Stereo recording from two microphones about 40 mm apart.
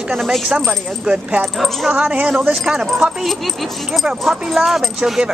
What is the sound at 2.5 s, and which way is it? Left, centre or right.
Speech, centre.